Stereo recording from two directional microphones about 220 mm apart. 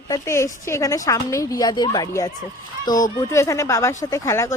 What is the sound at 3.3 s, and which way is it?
Speech, 15° left (ahead or behind).